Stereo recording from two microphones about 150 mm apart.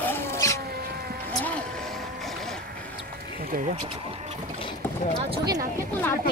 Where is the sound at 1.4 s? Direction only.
10° left (ahead or behind).